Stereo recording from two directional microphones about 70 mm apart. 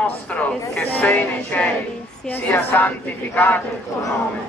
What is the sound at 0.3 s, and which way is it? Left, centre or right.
Speech, centre.